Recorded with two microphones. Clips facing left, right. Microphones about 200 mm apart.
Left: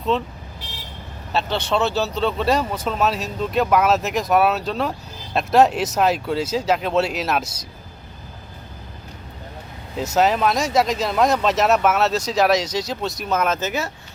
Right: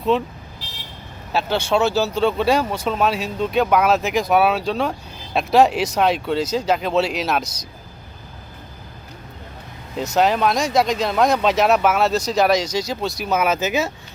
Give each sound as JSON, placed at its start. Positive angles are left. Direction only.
{"t": 0.1, "sound": "speech", "side_deg": 0}
{"t": 1.3, "sound": "speech", "side_deg": 0}
{"t": 10.2, "sound": "speech", "side_deg": 0}
{"t": 13.6, "sound": "speech", "side_deg": -15}